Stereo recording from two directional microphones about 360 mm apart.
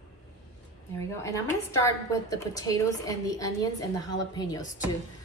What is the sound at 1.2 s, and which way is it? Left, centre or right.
A woman's voice, centre.